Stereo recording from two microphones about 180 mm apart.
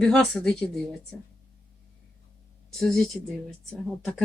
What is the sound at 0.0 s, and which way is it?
Speech, 5° left (ahead or behind).